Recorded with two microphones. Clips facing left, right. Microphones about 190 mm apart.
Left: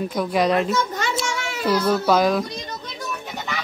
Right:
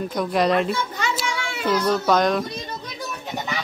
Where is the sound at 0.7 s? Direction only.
45° left (ahead or behind).